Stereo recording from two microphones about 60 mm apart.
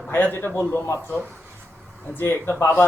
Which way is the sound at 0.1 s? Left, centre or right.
Left.